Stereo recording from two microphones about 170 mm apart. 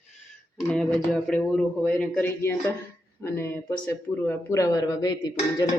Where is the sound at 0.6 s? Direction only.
5° left (ahead or behind).